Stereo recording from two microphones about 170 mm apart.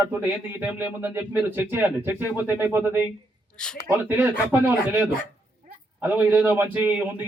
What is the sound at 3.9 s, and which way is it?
Speech, 10° right (ahead or behind).